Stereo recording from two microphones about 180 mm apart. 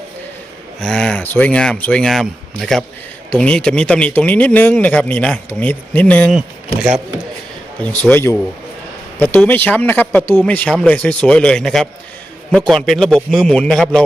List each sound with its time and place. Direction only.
0.8 s speech: 5° left (ahead or behind)
7.8 s speech: 5° left (ahead or behind)